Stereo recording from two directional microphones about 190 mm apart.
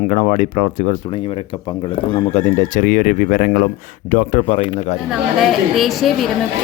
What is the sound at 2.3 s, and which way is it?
Speech, 40° left (ahead or behind).